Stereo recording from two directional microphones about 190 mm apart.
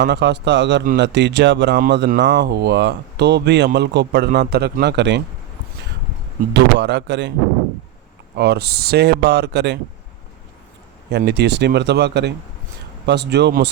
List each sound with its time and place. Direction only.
0.0 s speech: 65° right (ahead or behind)
1.8 s speech: 55° right (ahead or behind)
6.5 s speech: 65° right (ahead or behind)
8.4 s speech: 60° right (ahead or behind)
11.3 s speech: 60° right (ahead or behind)